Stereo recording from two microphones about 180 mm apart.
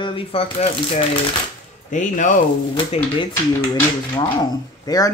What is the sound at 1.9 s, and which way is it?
Speech, 45° left (ahead or behind).